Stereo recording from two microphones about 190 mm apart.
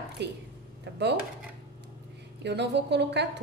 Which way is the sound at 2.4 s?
65° right (ahead or behind).